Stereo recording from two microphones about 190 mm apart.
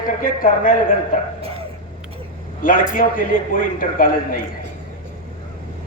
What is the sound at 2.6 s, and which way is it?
A man's voice, 45° left (ahead or behind).